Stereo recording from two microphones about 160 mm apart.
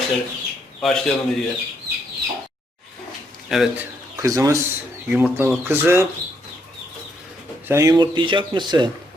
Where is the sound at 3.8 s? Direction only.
20° right (ahead or behind).